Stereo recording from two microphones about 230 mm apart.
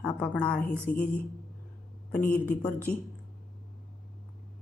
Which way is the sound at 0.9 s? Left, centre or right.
Left.